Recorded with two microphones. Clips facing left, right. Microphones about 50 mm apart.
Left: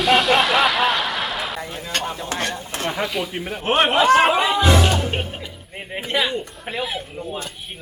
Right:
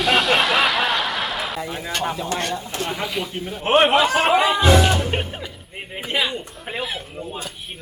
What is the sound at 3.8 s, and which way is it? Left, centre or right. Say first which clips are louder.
Speech: even; centre.